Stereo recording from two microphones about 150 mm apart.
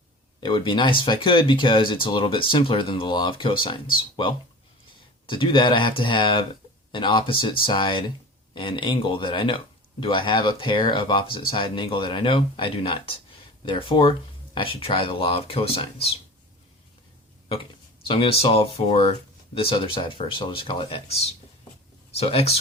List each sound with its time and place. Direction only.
0.3 s speech: 30° left (ahead or behind)
5.2 s speech: 35° left (ahead or behind)
18.0 s speech: 35° left (ahead or behind)